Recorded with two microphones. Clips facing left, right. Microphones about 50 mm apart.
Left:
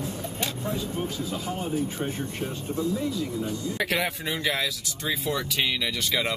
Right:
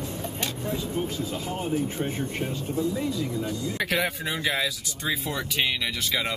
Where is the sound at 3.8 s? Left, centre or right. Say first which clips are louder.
Right 1 dB; centre.